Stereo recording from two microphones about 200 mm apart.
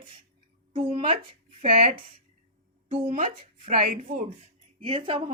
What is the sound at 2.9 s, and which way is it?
Speech, 35° right (ahead or behind).